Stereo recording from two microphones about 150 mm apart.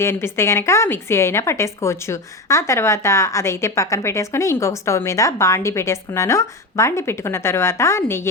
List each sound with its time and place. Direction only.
0.0 s a woman's voice: 15° left (ahead or behind)